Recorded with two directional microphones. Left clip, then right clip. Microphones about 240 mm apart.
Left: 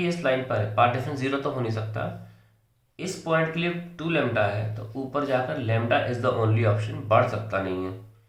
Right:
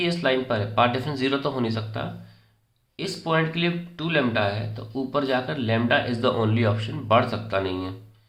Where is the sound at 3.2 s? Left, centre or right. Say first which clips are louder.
Right 1 dB; right.